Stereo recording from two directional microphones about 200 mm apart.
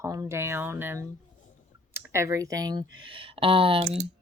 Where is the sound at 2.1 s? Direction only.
15° right (ahead or behind).